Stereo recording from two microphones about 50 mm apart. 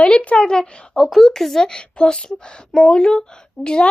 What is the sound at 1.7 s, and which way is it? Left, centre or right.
Speech, centre.